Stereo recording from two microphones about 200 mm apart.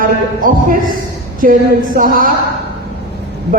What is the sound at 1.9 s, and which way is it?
Speech, 45° right (ahead or behind).